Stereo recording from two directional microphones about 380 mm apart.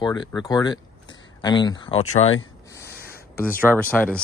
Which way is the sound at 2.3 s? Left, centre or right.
Left.